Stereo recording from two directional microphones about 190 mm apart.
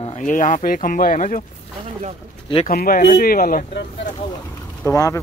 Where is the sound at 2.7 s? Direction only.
50° left (ahead or behind).